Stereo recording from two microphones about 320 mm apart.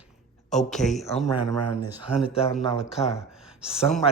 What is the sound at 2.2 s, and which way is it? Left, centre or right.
Speech, centre.